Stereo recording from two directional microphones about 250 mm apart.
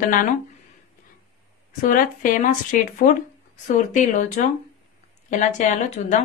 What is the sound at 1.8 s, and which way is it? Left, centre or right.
Speech, left.